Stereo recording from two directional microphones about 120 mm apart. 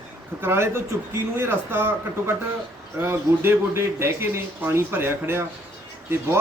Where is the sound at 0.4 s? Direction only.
20° right (ahead or behind).